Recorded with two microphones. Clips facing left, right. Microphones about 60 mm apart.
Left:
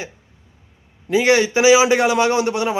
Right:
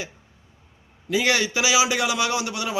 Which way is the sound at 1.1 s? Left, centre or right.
Left.